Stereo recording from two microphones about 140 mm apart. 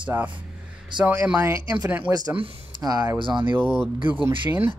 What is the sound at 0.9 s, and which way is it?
Speech, 35° right (ahead or behind).